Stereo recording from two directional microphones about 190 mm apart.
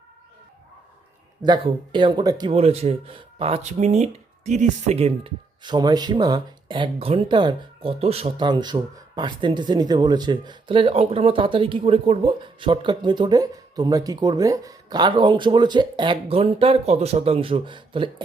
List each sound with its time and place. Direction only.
1.4 s speech: 25° right (ahead or behind)